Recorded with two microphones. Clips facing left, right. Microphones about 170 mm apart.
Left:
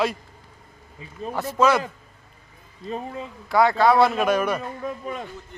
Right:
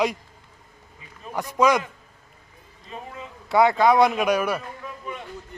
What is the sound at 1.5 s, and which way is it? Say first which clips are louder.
Speech: even; 15° right (ahead or behind).